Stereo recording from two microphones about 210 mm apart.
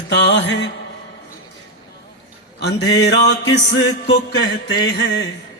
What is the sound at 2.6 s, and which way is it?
Music, 55° left (ahead or behind).